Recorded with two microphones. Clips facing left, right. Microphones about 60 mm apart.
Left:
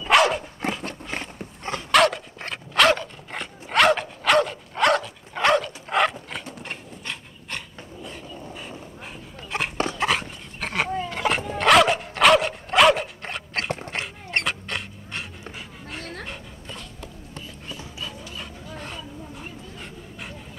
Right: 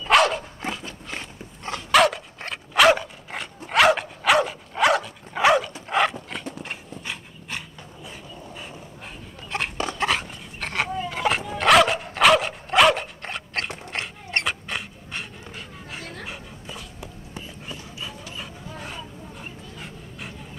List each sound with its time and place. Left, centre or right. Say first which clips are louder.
0.0 s dog: even; centre
0.6 s a sound: left 4 dB; left
1.9 s dog: even; centre